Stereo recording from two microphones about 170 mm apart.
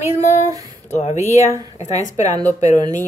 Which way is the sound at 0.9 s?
40° left (ahead or behind).